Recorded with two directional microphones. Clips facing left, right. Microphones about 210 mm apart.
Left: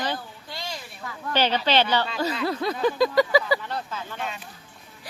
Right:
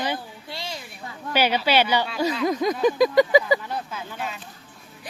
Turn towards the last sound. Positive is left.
turn(degrees=-5)  # may be behind; listen again after turning